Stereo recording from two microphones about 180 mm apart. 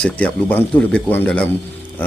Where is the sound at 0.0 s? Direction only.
5° left (ahead or behind).